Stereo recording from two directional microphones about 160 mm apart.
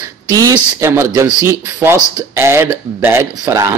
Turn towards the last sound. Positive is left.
turn(degrees=-15)  # may be behind; listen again after turning